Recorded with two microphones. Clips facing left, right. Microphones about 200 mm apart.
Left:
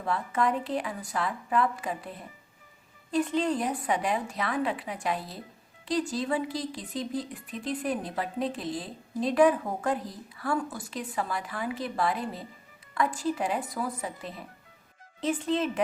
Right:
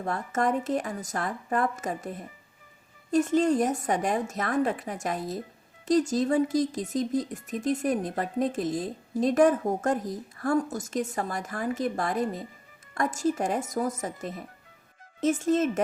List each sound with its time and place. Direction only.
0.0 s speech: 45° right (ahead or behind)